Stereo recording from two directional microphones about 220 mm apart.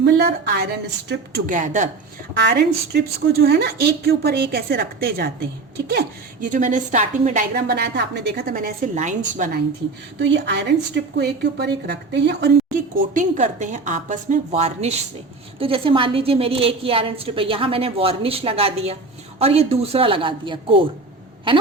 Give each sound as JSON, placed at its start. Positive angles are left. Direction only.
{"t": 0.0, "sound": "a woman's voice", "side_deg": -45}
{"t": 1.5, "sound": "a woman's voice", "side_deg": -35}
{"t": 2.3, "sound": "a woman's voice", "side_deg": -45}
{"t": 10.2, "sound": "a woman's voice", "side_deg": -55}
{"t": 13.1, "sound": "a woman's voice", "side_deg": -35}